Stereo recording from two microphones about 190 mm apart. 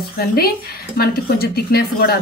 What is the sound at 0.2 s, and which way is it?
A woman's voice, 55° left (ahead or behind).